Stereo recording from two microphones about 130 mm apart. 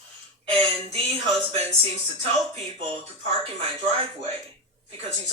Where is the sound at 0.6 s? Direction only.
50° right (ahead or behind).